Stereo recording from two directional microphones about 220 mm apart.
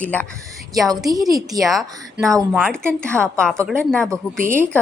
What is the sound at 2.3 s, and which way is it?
Speech, 15° right (ahead or behind).